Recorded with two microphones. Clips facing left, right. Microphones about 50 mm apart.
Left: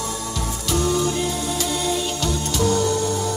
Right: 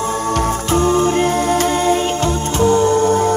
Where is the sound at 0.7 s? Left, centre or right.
Right.